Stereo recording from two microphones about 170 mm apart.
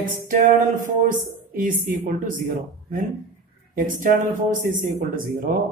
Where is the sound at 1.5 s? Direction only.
50° right (ahead or behind).